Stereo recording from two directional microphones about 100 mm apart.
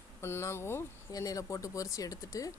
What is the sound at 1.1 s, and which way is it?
Speech, 35° left (ahead or behind).